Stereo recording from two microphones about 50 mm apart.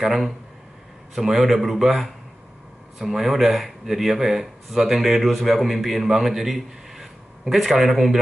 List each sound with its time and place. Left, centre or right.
0.0 s speech: centre